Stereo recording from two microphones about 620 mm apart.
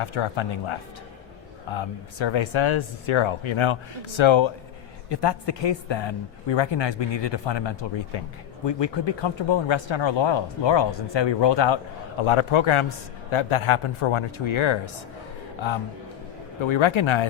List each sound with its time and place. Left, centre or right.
0.0 s a man's voice: left
16.6 s a man's voice: left